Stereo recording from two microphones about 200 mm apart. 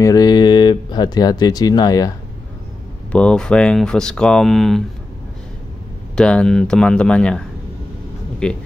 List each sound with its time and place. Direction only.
0.0 s speech: 20° left (ahead or behind)
3.1 s speech: 5° left (ahead or behind)
6.1 s speech: 5° left (ahead or behind)